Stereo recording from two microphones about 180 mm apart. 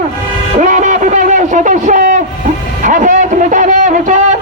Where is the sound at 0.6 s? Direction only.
45° right (ahead or behind).